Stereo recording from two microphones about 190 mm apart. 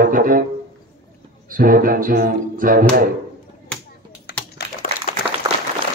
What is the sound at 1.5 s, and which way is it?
Speech, 50° right (ahead or behind).